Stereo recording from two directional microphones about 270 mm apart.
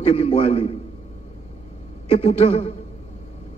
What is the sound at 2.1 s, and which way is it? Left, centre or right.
Speech, left.